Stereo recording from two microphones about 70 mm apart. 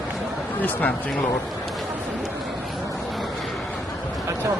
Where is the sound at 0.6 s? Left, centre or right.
Left.